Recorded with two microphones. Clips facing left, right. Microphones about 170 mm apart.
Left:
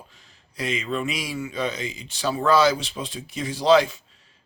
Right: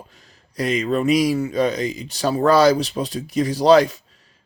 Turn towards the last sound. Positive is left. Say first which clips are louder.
# right 5 dB
turn(degrees=-40)  # may be behind; listen again after turning